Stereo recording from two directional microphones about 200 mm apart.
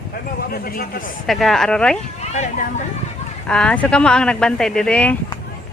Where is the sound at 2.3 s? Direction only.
35° left (ahead or behind).